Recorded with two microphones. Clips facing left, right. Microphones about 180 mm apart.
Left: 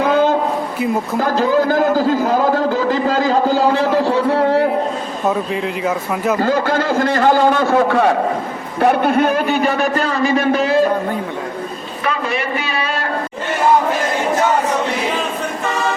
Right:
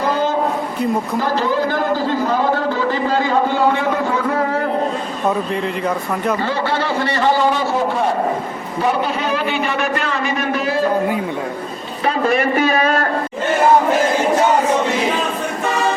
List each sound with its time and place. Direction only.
1.2 s a man's voice: 45° left (ahead or behind)
5.2 s speech: centre (ahead or behind)
6.4 s a man's voice: 45° left (ahead or behind); by 8.1 s 75° left (ahead or behind)
8.8 s a man's voice: 55° left (ahead or behind); by 10.5 s 30° left (ahead or behind)
12.0 s a man's voice: 45° right (ahead or behind)